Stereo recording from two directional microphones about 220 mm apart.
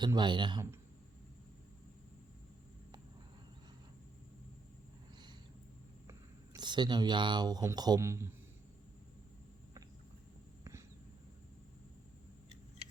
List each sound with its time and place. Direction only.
0.0 s speech: 20° right (ahead or behind)
6.1 s speech: 15° right (ahead or behind)
10.6 s a sound: 15° right (ahead or behind)